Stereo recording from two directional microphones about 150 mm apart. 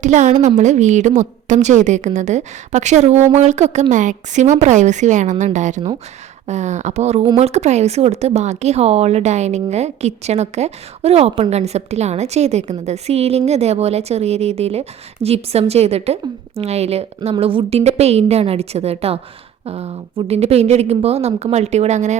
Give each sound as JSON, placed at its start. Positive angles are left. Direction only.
{"t": 0.0, "sound": "speech", "side_deg": -50}